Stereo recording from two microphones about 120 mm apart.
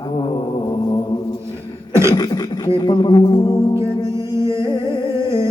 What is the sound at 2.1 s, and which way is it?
Beatboxing, 35° left (ahead or behind).